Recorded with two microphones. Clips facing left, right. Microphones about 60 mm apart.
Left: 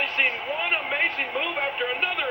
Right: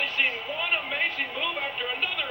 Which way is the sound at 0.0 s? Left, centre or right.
Left.